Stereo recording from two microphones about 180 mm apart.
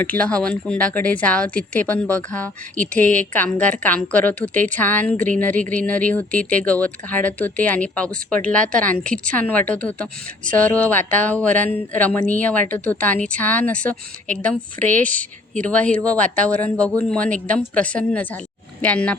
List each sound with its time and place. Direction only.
0.0 s a woman's voice: 10° left (ahead or behind)